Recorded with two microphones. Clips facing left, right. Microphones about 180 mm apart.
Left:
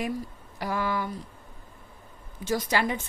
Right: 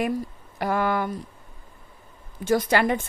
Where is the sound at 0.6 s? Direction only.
60° right (ahead or behind).